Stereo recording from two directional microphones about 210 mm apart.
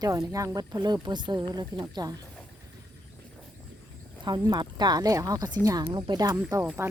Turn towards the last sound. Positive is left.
turn(degrees=-10)  # may be behind; listen again after turning